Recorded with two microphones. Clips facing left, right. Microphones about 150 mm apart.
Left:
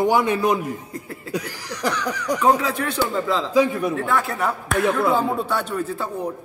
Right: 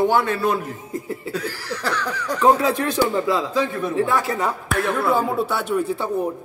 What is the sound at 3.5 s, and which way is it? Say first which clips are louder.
Cough: left 4 dB; 15° left (ahead or behind).